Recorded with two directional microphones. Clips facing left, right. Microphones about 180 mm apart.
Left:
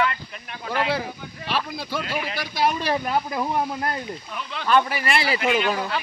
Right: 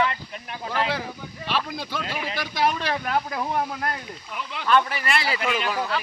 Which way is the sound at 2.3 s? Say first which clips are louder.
Even; 10° left (ahead or behind).